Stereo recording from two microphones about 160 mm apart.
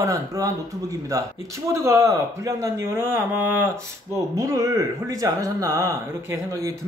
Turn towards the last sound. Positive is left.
turn(degrees=-20)  # may be behind; listen again after turning